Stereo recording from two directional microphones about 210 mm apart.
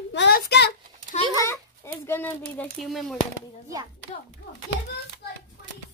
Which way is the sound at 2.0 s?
10° left (ahead or behind).